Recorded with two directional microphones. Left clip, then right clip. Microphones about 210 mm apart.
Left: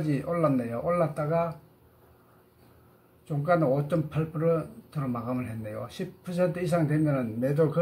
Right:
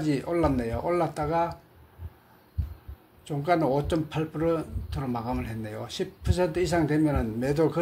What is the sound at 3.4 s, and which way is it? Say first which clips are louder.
Speech: even; 25° right (ahead or behind).